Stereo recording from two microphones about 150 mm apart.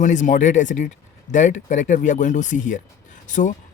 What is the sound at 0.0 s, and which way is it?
Speech, 55° left (ahead or behind).